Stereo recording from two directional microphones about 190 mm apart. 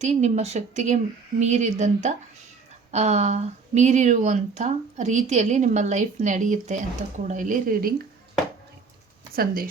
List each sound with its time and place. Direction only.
0.0 s speech: 35° right (ahead or behind)
9.3 s speech: 50° right (ahead or behind)